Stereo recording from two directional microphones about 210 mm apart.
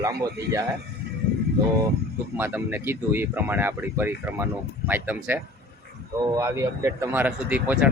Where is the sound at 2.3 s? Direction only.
10° right (ahead or behind).